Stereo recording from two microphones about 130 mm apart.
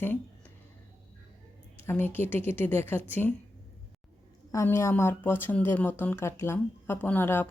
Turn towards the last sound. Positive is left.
turn(degrees=15)  # may be behind; listen again after turning